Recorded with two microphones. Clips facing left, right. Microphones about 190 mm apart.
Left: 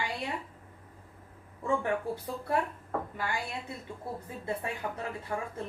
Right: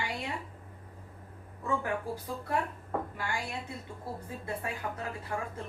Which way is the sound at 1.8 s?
25° left (ahead or behind).